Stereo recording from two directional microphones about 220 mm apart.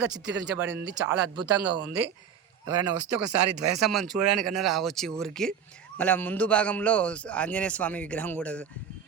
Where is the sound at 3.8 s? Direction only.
Centre (ahead or behind).